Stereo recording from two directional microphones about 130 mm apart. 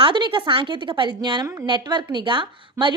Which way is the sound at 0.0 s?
40° right (ahead or behind).